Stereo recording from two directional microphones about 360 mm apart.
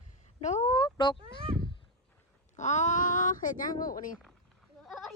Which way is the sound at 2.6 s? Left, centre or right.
Centre.